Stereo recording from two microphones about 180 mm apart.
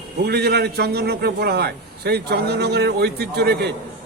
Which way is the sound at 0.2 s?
65° right (ahead or behind).